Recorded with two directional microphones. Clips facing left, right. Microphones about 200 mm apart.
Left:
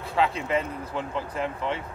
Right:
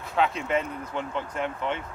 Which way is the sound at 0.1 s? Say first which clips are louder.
Even; centre (ahead or behind).